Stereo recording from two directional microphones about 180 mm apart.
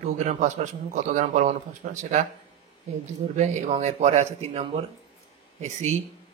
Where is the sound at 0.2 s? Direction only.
40° right (ahead or behind).